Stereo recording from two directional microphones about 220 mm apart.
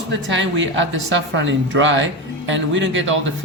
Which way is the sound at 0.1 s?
55° right (ahead or behind).